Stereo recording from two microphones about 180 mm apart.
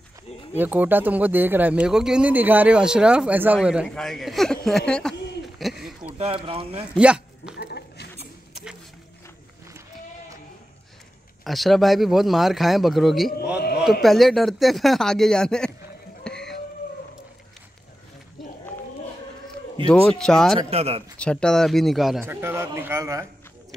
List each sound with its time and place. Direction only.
0.6 s speech: 10° right (ahead or behind)
5.6 s a sound: centre (ahead or behind)
6.1 s speech: 30° right (ahead or behind)
7.0 s a sound: 5° right (ahead or behind)
7.5 s dog: 65° left (ahead or behind)
11.4 s speech: centre (ahead or behind)
13.6 s a sound: 60° left (ahead or behind)
14.0 s speech: centre (ahead or behind)
16.3 s music: 5° left (ahead or behind)
19.9 s speech: 5° left (ahead or behind)
20.5 s speech: 35° right (ahead or behind)
21.2 s speech: 5° left (ahead or behind)
22.2 s speech: 10° right (ahead or behind)